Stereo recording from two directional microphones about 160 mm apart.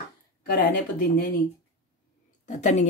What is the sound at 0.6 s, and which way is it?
Speech, 60° left (ahead or behind).